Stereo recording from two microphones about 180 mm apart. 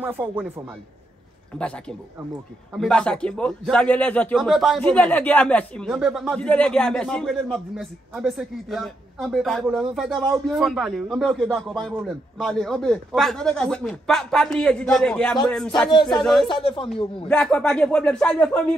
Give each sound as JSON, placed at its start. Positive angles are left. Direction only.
{"t": 0.0, "sound": "speech", "side_deg": -10}
{"t": 1.5, "sound": "a man's voice", "side_deg": 5}
{"t": 2.7, "sound": "a man's voice", "side_deg": 5}
{"t": 16.4, "sound": "speech", "side_deg": 30}
{"t": 17.3, "sound": "speech", "side_deg": 5}